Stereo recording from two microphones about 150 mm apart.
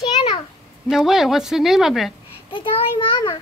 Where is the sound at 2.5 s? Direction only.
35° left (ahead or behind).